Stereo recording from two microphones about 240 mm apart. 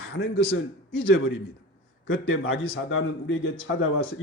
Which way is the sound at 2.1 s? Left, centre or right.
Left.